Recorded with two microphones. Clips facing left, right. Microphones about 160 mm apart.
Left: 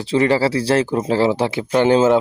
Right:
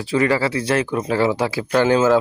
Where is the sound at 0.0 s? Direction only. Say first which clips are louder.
Left 2 dB; 25° left (ahead or behind).